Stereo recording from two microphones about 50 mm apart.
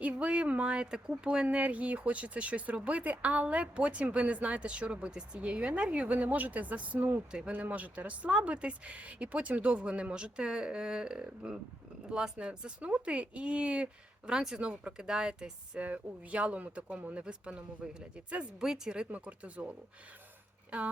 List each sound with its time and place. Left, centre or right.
0.0 s speech: right
7.3 s speech: centre
7.5 s speech: right
15.8 s speech: right
19.1 s speech: right